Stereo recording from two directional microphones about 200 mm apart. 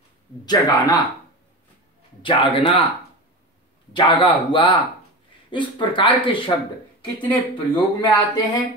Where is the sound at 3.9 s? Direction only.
25° left (ahead or behind).